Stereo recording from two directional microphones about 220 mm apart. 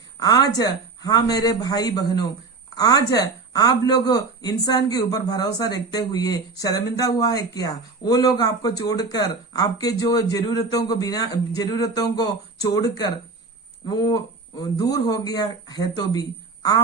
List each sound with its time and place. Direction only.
0.2 s speech: 15° left (ahead or behind)